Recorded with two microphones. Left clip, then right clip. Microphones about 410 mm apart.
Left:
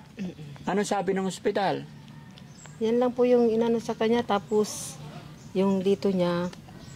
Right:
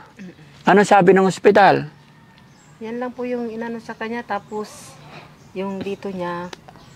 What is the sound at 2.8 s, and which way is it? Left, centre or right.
Speech, left.